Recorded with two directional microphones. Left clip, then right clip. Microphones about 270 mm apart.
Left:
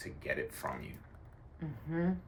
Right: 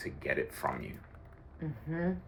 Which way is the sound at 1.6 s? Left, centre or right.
Centre.